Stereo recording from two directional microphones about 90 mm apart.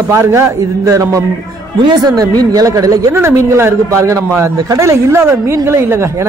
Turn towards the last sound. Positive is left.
turn(degrees=-30)  # may be behind; listen again after turning